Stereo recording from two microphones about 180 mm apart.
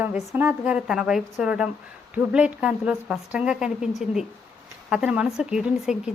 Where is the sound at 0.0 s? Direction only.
10° right (ahead or behind).